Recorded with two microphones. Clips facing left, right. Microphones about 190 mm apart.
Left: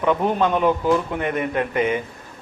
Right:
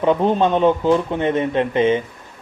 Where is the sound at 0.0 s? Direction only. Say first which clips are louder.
Right 3 dB; 30° right (ahead or behind).